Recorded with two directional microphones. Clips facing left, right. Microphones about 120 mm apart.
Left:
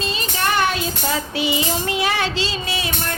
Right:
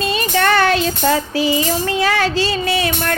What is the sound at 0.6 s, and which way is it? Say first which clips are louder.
Music: right 6 dB; 90° right.